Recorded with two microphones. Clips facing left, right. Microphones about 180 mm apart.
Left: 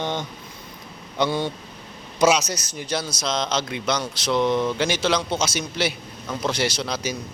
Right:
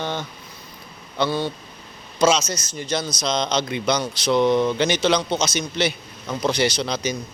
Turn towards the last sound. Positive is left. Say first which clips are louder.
# right 3 dB
turn(degrees=5)  # may be behind; listen again after turning